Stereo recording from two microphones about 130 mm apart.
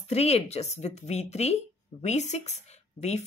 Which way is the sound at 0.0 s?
55° left (ahead or behind).